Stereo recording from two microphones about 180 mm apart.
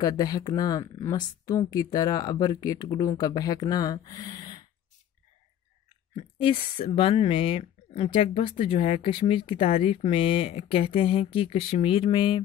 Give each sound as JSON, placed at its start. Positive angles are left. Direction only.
{"t": 0.0, "sound": "speech", "side_deg": 20}
{"t": 6.1, "sound": "speech", "side_deg": 30}